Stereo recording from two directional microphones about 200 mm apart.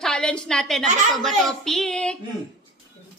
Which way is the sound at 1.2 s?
Centre (ahead or behind).